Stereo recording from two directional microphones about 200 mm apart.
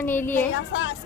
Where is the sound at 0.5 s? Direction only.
75° left (ahead or behind).